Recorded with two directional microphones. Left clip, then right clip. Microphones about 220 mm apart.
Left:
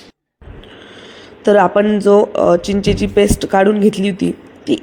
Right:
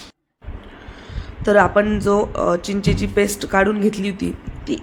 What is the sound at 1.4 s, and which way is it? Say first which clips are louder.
Speech: left 3 dB; 15° left (ahead or behind).